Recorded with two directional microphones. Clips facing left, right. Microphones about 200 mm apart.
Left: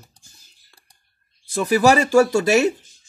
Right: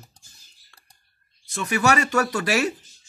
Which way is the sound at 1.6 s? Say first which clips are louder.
Left 6 dB; 35° left (ahead or behind).